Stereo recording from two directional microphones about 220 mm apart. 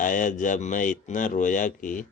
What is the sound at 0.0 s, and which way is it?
Speech, 35° left (ahead or behind).